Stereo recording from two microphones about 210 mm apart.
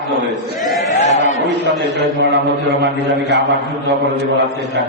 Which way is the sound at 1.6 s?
60° right (ahead or behind).